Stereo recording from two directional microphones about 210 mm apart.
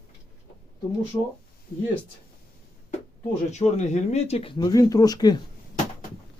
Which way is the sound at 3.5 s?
35° left (ahead or behind).